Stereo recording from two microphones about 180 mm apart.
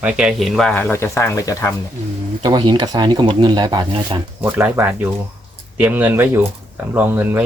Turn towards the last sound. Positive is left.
turn(degrees=-10)  # may be behind; listen again after turning